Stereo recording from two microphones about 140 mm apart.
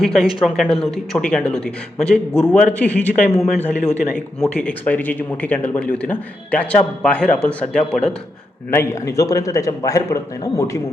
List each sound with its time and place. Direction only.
0.0 s speech: centre (ahead or behind)
3.2 s speech: 50° left (ahead or behind)
3.6 s speech: 5° left (ahead or behind)
8.7 s a man's voice: 20° left (ahead or behind)